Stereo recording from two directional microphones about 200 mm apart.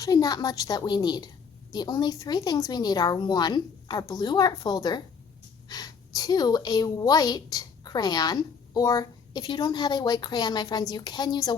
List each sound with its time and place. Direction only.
0.0 s a woman's voice: 20° left (ahead or behind)